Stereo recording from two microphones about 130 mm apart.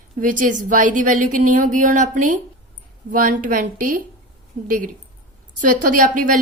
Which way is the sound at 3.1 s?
90° right.